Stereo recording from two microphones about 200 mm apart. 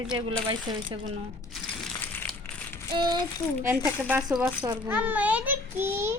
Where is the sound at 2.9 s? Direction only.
20° right (ahead or behind).